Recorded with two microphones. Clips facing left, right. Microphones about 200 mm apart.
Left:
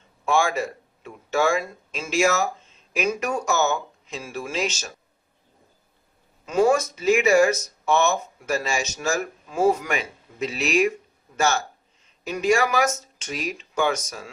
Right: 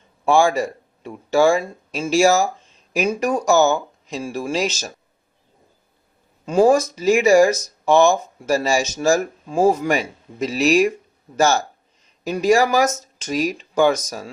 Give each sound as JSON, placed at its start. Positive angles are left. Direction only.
{"t": 0.3, "sound": "speech", "side_deg": -35}
{"t": 6.4, "sound": "speech", "side_deg": -30}